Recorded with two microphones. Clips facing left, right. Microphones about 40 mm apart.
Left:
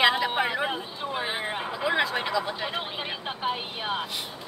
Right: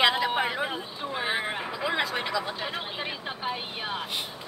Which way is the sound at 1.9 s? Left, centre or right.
Left.